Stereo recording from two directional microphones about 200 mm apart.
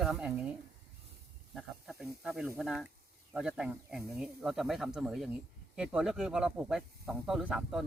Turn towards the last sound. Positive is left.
turn(degrees=-5)  # may be behind; listen again after turning